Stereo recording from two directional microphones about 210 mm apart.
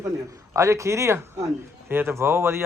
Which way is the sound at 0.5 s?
15° right (ahead or behind).